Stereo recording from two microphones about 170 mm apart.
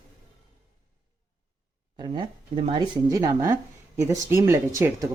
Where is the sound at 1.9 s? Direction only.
25° right (ahead or behind).